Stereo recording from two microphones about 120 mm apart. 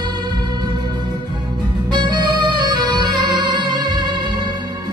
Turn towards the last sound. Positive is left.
turn(degrees=-40)  # may be behind; listen again after turning